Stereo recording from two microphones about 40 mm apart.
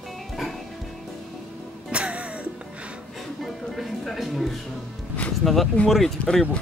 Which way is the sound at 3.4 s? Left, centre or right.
Centre.